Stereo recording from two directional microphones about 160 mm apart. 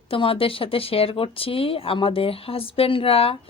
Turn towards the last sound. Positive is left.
turn(degrees=35)  # may be behind; listen again after turning